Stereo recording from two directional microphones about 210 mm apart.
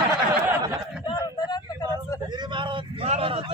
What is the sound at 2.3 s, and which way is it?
A man's voice, 20° right (ahead or behind).